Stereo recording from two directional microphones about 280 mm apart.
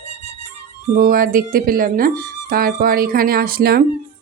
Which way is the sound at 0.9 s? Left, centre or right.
Right.